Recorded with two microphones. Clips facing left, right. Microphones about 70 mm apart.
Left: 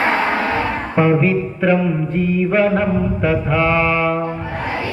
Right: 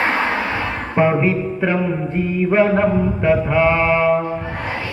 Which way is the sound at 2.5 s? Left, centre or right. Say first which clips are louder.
Right 3 dB; right.